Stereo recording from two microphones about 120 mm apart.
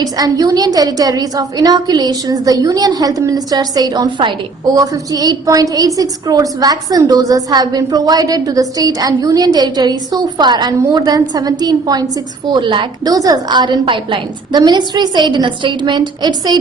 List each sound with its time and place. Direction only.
0.0 s a woman's voice: 30° right (ahead or behind)